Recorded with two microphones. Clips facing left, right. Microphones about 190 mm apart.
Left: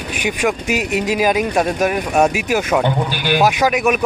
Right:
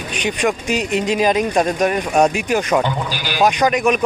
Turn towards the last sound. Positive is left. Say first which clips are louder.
# even
turn(degrees=5)  # may be behind; listen again after turning